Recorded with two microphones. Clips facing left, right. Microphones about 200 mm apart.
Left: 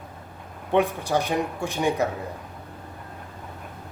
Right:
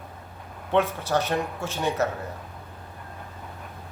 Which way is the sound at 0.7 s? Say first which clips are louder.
Left 1 dB; 15° left (ahead or behind).